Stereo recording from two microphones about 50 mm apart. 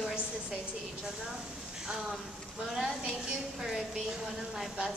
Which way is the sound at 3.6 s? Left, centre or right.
Centre.